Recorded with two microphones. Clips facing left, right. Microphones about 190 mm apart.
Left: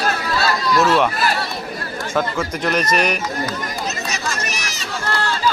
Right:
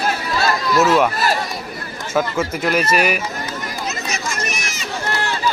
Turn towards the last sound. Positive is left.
turn(degrees=-20)  # may be behind; listen again after turning